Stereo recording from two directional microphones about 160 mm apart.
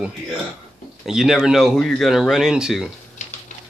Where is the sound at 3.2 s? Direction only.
50° left (ahead or behind).